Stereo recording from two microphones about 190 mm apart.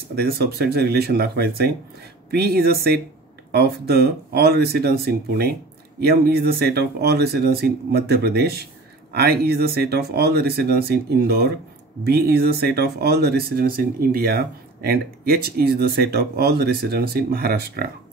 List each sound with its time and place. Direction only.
0.1 s speech: 55° right (ahead or behind)